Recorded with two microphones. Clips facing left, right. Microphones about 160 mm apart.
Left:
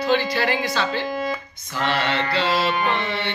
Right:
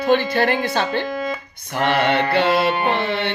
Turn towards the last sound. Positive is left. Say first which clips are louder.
# right 3 dB
turn(degrees=-60)  # may be behind; listen again after turning